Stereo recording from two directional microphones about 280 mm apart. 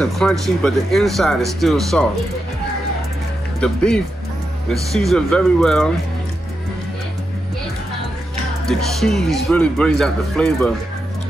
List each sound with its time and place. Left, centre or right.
0.0 s speech: centre
3.6 s speech: centre
8.6 s speech: centre